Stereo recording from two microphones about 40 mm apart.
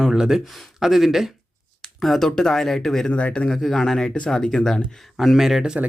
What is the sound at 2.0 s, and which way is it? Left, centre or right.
Speech, centre.